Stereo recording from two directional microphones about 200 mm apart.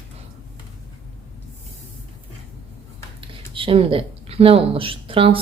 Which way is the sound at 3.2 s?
25° right (ahead or behind).